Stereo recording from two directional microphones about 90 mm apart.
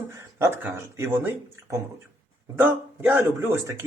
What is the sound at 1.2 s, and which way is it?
Speech, 20° right (ahead or behind).